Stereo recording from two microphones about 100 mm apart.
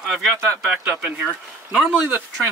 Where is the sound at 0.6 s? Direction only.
15° right (ahead or behind).